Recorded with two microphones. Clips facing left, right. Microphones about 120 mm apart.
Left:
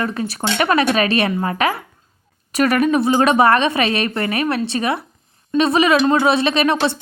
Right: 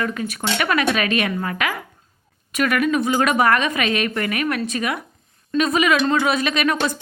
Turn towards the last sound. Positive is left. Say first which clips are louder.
# left 4 dB
turn(degrees=30)  # may be behind; listen again after turning